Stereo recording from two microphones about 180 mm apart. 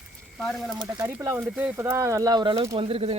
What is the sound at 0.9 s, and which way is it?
Speech, 20° right (ahead or behind).